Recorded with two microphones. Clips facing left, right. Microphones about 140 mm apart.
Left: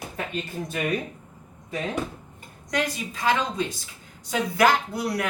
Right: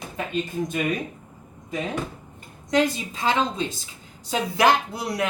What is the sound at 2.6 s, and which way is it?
Speech, 25° right (ahead or behind).